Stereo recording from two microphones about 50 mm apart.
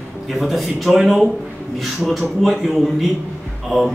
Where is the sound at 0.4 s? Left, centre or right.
Centre.